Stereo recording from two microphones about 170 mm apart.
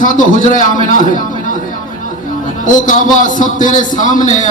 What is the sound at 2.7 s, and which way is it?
A woman's voice, 50° left (ahead or behind).